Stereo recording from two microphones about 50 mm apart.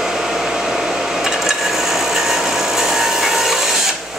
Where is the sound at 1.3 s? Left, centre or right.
Centre.